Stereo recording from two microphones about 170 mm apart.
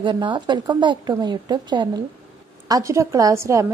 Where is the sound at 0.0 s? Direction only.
25° right (ahead or behind).